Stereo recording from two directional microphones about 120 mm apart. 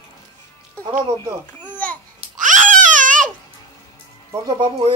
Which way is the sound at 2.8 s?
90° right.